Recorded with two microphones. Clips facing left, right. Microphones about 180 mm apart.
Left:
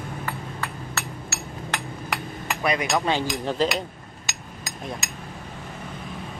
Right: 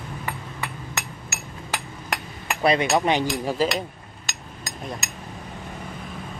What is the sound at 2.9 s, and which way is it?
Speech, 20° right (ahead or behind).